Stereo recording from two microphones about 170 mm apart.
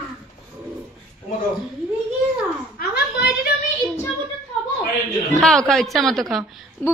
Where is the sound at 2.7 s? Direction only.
70° left (ahead or behind).